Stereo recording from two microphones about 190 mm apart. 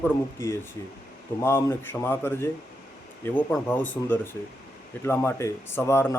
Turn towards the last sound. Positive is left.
turn(degrees=15)  # may be behind; listen again after turning